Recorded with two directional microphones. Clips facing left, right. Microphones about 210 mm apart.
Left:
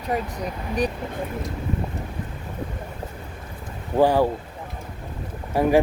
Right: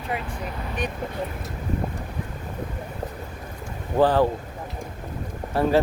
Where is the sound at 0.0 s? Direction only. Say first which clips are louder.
Left 4 dB; 40° left (ahead or behind).